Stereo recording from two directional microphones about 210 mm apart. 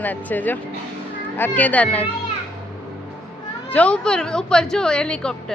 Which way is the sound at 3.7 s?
5° left (ahead or behind).